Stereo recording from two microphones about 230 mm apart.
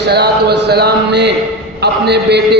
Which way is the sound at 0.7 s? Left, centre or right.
Right.